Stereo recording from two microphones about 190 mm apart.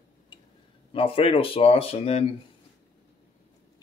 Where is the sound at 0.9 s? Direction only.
30° left (ahead or behind).